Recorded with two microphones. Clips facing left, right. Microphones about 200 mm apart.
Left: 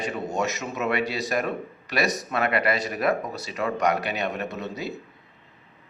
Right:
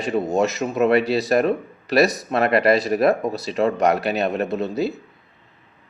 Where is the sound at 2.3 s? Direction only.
35° right (ahead or behind).